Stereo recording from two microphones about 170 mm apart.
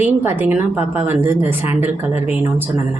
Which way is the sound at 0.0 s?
10° right (ahead or behind).